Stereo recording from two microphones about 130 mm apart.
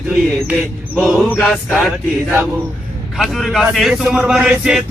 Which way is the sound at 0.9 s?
5° right (ahead or behind).